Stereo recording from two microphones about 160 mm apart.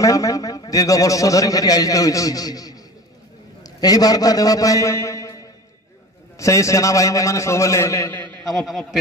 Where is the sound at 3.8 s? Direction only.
25° left (ahead or behind).